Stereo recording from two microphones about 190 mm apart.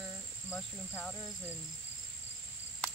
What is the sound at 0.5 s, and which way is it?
Cricket, 10° left (ahead or behind).